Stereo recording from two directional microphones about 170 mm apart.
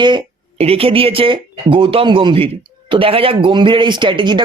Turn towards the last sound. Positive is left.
turn(degrees=-30)  # may be behind; listen again after turning